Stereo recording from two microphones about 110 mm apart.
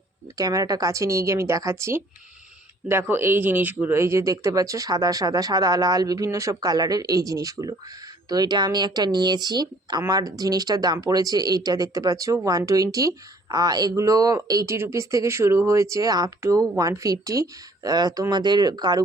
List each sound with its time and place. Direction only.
0.3 s a woman's voice: 35° right (ahead or behind)